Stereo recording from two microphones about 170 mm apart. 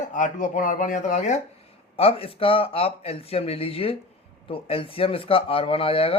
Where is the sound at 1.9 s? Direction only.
35° left (ahead or behind).